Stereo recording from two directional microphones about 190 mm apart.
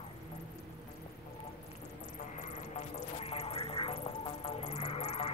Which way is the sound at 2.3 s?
35° left (ahead or behind).